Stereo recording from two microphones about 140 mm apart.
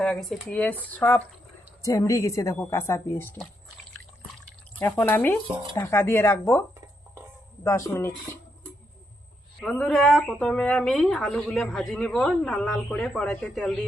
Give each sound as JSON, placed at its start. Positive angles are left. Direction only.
{"t": 0.0, "sound": "speech", "side_deg": 0}
{"t": 4.8, "sound": "speech", "side_deg": 15}
{"t": 9.6, "sound": "speech", "side_deg": 5}